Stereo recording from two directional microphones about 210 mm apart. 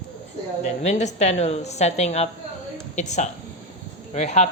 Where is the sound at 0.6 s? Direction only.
35° left (ahead or behind).